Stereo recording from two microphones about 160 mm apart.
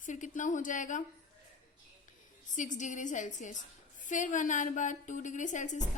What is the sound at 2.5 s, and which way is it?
A woman's voice, 50° left (ahead or behind).